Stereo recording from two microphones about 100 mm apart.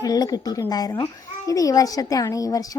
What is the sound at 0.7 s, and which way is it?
A woman's voice, 40° left (ahead or behind).